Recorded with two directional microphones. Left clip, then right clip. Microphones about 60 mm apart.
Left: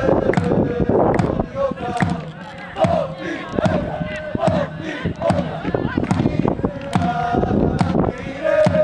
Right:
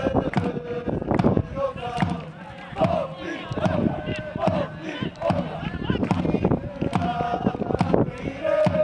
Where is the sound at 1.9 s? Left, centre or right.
Centre.